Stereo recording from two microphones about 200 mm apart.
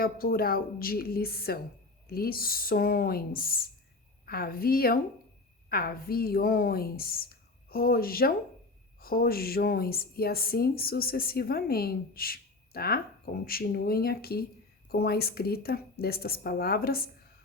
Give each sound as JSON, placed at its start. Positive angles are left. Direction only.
{"t": 0.0, "sound": "a woman's voice", "side_deg": 50}